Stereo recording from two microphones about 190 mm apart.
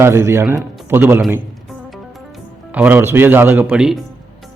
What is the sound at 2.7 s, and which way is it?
Speech, 10° right (ahead or behind).